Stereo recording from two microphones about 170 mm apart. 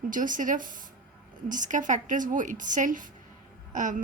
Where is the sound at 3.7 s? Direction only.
50° right (ahead or behind).